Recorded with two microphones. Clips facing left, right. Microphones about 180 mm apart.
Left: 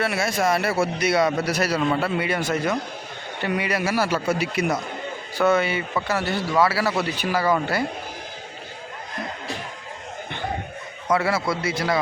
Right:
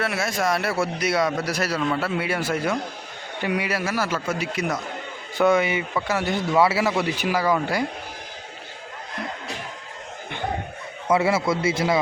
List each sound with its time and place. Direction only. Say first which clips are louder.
0.0 s speech: left 2 dB; centre (ahead or behind)
3.8 s speech: left 3 dB; 30° left (ahead or behind)
5.4 s a man's voice: right 1 dB; 15° right (ahead or behind)
7.3 s speech: left 1 dB; 5° left (ahead or behind)
11.1 s a man's voice: right 2 dB; 25° right (ahead or behind)